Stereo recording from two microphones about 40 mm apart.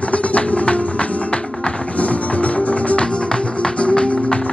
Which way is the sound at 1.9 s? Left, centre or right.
Left.